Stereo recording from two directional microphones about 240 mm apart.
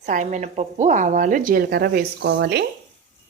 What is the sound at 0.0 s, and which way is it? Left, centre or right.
Speech, right.